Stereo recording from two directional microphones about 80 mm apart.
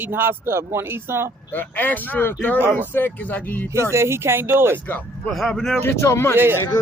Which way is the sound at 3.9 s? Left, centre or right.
Right.